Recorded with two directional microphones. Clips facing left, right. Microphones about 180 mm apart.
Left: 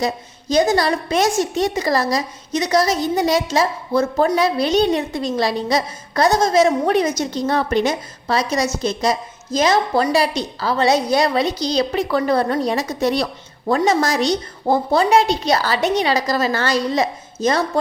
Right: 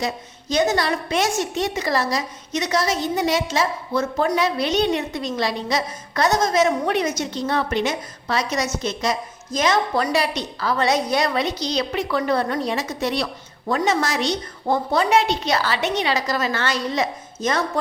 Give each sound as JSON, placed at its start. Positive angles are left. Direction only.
{"t": 0.0, "sound": "a woman's voice", "side_deg": 35}